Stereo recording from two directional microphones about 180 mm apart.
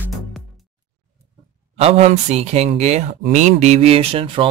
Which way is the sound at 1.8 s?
35° right (ahead or behind).